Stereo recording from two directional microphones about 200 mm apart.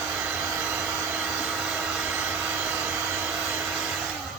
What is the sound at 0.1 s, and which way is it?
Hair dryer, 10° right (ahead or behind).